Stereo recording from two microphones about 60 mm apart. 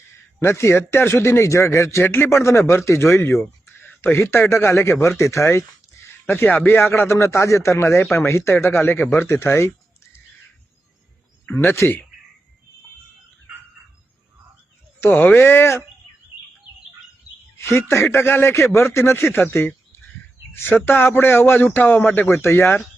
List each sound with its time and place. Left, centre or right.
0.4 s speech: left
6.7 s speech: left
9.0 s speech: left
11.8 s speech: left
15.1 s speech: left
17.6 s speech: left